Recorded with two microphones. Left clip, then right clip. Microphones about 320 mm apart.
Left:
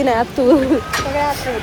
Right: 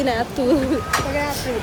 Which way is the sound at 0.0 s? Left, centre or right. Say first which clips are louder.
Left 5 dB; centre.